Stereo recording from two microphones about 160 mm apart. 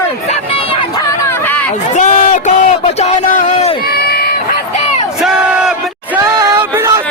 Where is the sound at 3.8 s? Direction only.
75° left (ahead or behind).